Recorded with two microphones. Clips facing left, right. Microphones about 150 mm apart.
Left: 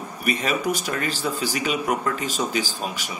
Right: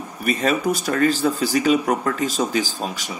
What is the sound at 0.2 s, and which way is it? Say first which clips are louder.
Speech: right 4 dB; 40° right (ahead or behind).